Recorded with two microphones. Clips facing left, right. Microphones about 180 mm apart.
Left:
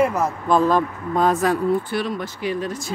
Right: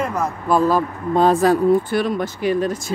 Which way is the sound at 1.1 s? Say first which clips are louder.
Right 4 dB; 30° right (ahead or behind).